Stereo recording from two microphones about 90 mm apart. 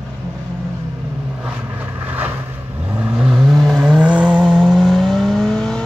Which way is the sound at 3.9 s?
10° right (ahead or behind).